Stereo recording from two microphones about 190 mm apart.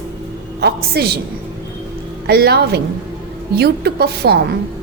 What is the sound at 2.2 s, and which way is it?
A woman's voice, 55° right (ahead or behind).